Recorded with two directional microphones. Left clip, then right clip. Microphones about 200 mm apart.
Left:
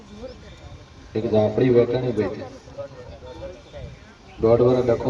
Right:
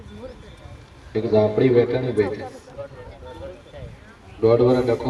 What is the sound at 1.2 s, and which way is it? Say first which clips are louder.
Speech: right 2 dB; 25° right (ahead or behind).